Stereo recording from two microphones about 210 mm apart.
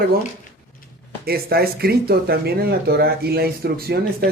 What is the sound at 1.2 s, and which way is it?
Speech, 45° right (ahead or behind).